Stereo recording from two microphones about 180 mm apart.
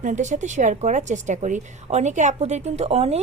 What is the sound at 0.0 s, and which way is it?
A woman's voice, 45° right (ahead or behind).